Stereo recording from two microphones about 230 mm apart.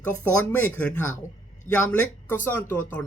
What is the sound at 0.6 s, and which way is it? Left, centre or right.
Speech, centre.